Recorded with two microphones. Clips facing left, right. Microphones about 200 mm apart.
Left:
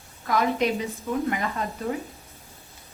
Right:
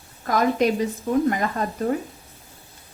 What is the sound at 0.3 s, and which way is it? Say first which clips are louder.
Speech: right 3 dB; 45° right (ahead or behind).